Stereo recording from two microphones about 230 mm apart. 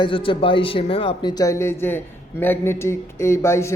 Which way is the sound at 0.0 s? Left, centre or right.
Left.